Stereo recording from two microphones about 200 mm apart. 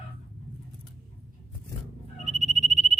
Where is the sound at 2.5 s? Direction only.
35° left (ahead or behind).